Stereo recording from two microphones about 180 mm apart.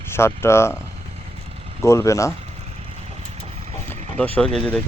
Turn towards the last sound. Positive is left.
turn(degrees=5)  # may be behind; listen again after turning